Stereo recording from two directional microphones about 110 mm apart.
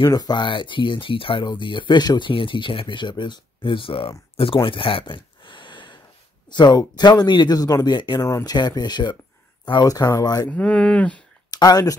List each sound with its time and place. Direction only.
0.0 s speech: 35° left (ahead or behind); by 4.1 s 55° left (ahead or behind)
4.4 s a sound: 55° left (ahead or behind)
6.5 s speech: 40° left (ahead or behind)
8.3 s speech: 30° left (ahead or behind)
8.5 s speech: 40° left (ahead or behind)
10.5 s speech: 10° left (ahead or behind)
11.5 s speech: 35° left (ahead or behind)